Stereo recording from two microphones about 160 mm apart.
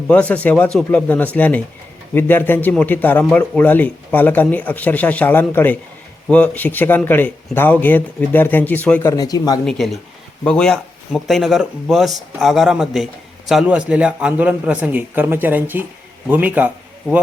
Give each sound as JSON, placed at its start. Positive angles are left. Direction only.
{"t": 0.1, "sound": "speech", "side_deg": 10}
{"t": 9.1, "sound": "speech", "side_deg": 25}
{"t": 9.6, "sound": "a man's voice", "side_deg": 0}